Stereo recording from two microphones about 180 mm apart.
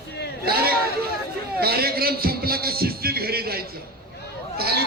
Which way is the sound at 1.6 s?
60° right (ahead or behind).